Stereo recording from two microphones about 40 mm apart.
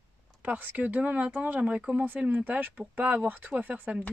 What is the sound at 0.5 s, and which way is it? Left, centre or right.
Speech, right.